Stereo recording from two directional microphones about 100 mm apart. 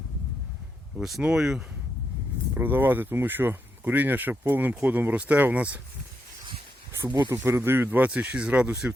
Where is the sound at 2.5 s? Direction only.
20° right (ahead or behind).